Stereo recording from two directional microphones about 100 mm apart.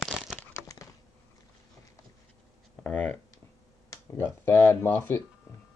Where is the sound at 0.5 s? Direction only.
30° left (ahead or behind).